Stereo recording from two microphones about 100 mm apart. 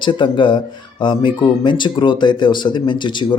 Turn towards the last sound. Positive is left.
turn(degrees=50)  # may be behind; listen again after turning